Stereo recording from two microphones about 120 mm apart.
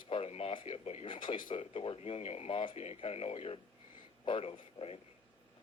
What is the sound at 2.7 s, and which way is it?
A man's voice, 60° left (ahead or behind).